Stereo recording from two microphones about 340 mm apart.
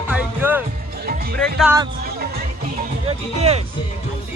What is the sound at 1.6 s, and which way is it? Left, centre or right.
Speech, centre.